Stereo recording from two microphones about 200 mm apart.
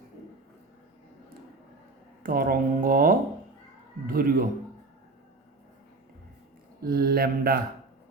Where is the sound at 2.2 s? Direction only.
45° right (ahead or behind).